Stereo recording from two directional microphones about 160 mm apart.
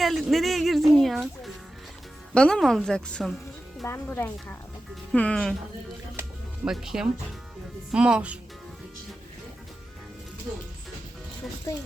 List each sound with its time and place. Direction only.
0.0 s a woman's voice: centre (ahead or behind)
3.8 s speech: 15° left (ahead or behind)
6.7 s a woman's voice: 5° right (ahead or behind)
11.7 s speech: 20° left (ahead or behind)